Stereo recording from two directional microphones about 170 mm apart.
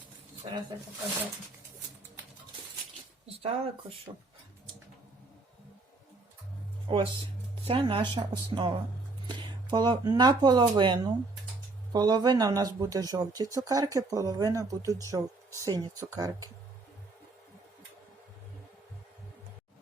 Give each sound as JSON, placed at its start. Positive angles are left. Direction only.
{"t": 3.3, "sound": "speech", "side_deg": -35}
{"t": 6.8, "sound": "speech", "side_deg": -30}